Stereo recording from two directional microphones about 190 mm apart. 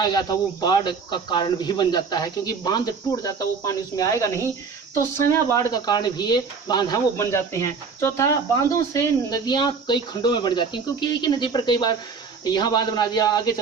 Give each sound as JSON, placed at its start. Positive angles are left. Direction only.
{"t": 0.0, "sound": "speech", "side_deg": 20}